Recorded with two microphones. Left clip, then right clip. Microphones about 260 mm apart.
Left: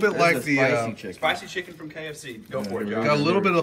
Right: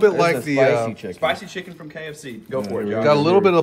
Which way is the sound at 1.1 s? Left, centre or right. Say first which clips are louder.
Right 3 dB; right.